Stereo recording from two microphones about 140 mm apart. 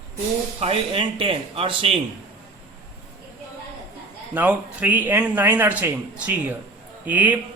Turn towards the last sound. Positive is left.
turn(degrees=-10)  # may be behind; listen again after turning